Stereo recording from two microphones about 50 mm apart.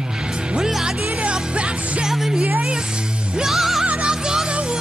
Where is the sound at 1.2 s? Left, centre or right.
Right.